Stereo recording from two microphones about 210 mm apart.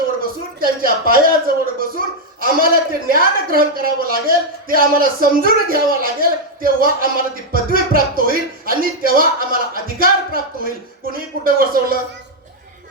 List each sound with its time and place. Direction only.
0.2 s a woman's voice: 45° right (ahead or behind)